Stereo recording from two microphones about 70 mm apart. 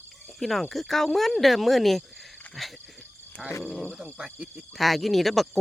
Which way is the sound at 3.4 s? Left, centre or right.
Right.